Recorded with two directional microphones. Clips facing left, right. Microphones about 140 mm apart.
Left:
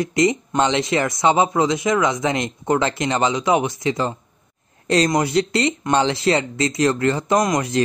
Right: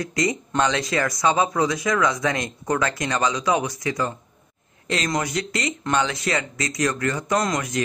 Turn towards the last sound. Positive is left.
turn(degrees=20)  # may be behind; listen again after turning